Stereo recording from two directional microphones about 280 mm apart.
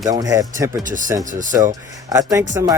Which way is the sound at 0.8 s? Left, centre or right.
Right.